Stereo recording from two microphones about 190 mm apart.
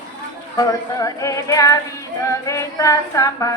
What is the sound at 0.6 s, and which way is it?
Music, 15° left (ahead or behind).